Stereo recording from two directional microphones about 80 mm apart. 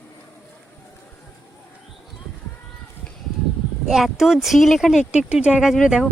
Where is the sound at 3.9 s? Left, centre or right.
Centre.